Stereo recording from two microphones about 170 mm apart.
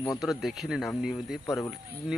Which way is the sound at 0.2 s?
Centre (ahead or behind).